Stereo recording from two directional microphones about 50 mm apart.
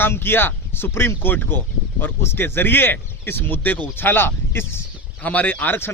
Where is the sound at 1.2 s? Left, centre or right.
Left.